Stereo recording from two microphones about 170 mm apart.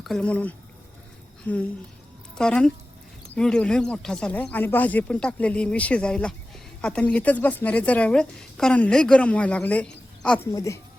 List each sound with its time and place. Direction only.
0.0 s a woman's voice: 5° left (ahead or behind)
10.5 s speech: 20° left (ahead or behind)